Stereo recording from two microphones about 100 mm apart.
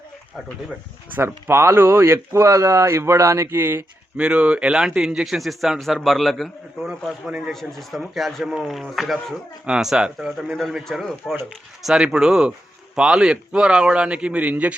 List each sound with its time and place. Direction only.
1.1 s speech: 25° right (ahead or behind)
4.2 s a man's voice: 10° right (ahead or behind)